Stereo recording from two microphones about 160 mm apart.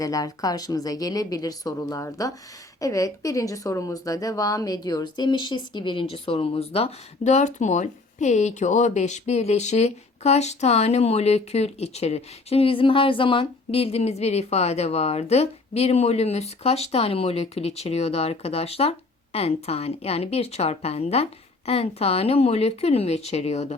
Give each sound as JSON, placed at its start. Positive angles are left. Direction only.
{"t": 0.0, "sound": "a woman's voice", "side_deg": 20}